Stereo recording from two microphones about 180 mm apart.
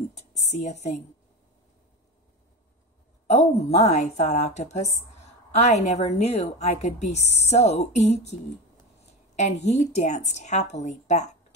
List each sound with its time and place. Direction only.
0.4 s a woman's voice: 40° left (ahead or behind)
3.3 s a woman's voice: 40° left (ahead or behind)
9.4 s a woman's voice: 40° left (ahead or behind)